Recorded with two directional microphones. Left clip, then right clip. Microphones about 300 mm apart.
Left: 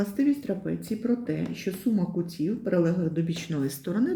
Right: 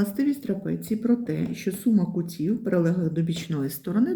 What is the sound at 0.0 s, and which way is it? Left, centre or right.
Speech, centre.